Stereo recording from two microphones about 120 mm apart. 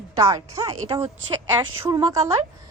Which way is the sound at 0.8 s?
45° right (ahead or behind).